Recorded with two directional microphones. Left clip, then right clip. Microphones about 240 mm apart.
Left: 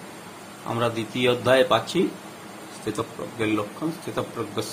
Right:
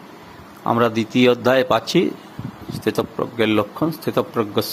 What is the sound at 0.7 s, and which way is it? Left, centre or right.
Speech, right.